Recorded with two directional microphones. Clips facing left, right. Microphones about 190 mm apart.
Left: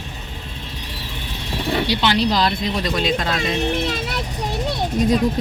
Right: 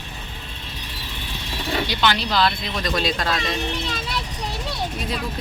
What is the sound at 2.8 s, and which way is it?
Speech, 20° left (ahead or behind).